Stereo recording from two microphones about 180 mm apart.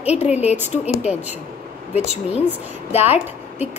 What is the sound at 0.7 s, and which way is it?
A woman's voice, 35° left (ahead or behind).